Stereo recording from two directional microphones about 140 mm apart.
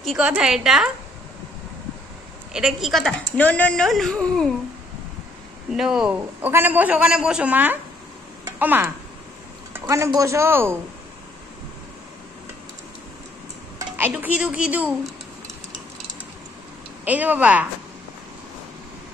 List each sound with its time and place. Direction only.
0.0 s a woman's voice: centre (ahead or behind)
2.5 s speech: 5° right (ahead or behind)
5.7 s speech: 5° right (ahead or behind)
6.1 s a woman's voice: 15° right (ahead or behind)
13.7 s speech: 15° right (ahead or behind)
17.0 s a woman's voice: 10° right (ahead or behind)